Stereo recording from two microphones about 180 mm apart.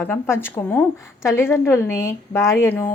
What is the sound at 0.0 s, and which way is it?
A woman's voice, 10° left (ahead or behind).